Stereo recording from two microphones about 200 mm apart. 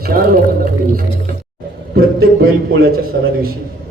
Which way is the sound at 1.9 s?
50° right (ahead or behind).